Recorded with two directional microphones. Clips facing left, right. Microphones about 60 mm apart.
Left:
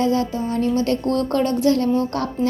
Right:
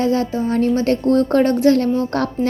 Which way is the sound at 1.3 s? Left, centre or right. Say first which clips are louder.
Right 2 dB; right.